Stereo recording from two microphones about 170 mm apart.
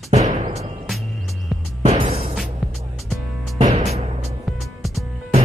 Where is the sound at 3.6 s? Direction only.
40° right (ahead or behind).